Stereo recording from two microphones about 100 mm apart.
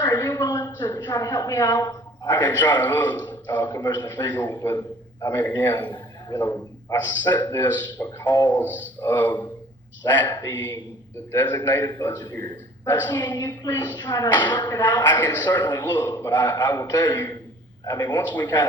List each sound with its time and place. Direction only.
0.1 s a man's voice: 25° left (ahead or behind)
1.8 s a sound: 35° left (ahead or behind)
2.3 s a man's voice: 20° left (ahead or behind)
3.7 s a man's voice: 30° left (ahead or behind)
3.9 s speech: 20° left (ahead or behind)
5.7 s a sound: 45° left (ahead or behind)
6.9 s speech: 20° left (ahead or behind)
11.3 s speech: 20° left (ahead or behind)
11.9 s speech: 30° left (ahead or behind)
14.4 s speech: 50° left (ahead or behind)
14.7 s speech: 20° left (ahead or behind)